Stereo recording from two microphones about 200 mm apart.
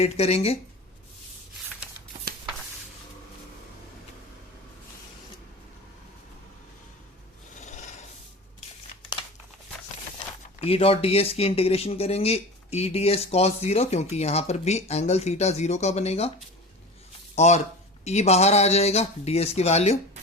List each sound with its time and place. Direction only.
0.0 s speech: 30° left (ahead or behind)
7.6 s filing: 35° left (ahead or behind)
10.6 s speech: 30° left (ahead or behind)
17.3 s speech: 35° left (ahead or behind)